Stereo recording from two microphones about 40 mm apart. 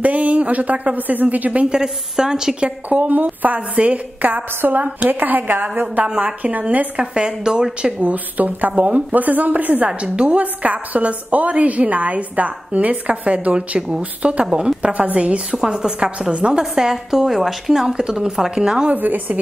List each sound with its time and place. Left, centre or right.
0.0 s a woman's voice: right
1.7 s a woman's voice: centre
2.6 s a woman's voice: right
7.0 s a woman's voice: right
8.0 s a woman's voice: right
9.8 s a woman's voice: right
10.4 s a woman's voice: right
13.7 s a woman's voice: right
14.2 s a woman's voice: right
15.5 s a woman's voice: centre
16.7 s a woman's voice: centre
17.7 s a woman's voice: centre
18.9 s a woman's voice: right